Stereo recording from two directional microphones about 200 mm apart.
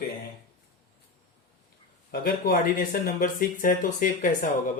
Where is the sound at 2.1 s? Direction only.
45° left (ahead or behind).